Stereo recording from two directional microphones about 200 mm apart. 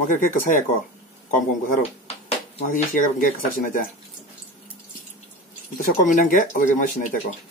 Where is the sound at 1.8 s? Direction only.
35° left (ahead or behind).